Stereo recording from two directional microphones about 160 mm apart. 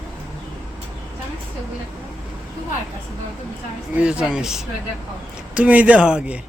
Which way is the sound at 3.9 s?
5° right (ahead or behind).